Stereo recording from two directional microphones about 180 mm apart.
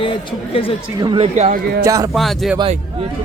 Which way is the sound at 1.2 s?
40° right (ahead or behind).